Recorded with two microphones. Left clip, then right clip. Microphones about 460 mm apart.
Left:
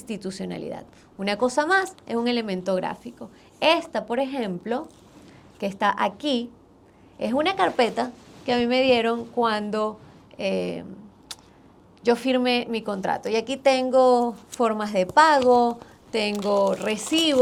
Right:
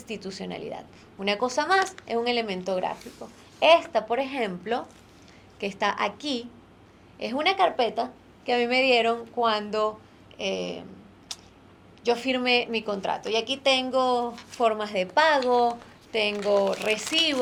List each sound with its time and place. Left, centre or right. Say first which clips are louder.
0.0 s a woman's voice: left 2 dB; left
11.3 s tick: right 1 dB; left
12.0 s a woman's voice: left 3 dB; left